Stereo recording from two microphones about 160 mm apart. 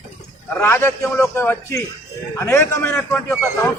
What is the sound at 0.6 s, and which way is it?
A man's voice, 15° left (ahead or behind).